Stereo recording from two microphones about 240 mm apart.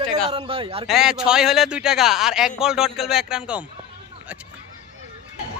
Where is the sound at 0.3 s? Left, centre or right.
Right.